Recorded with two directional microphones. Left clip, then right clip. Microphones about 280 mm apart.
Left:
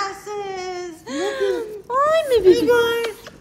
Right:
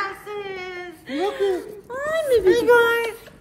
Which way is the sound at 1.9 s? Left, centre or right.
Left.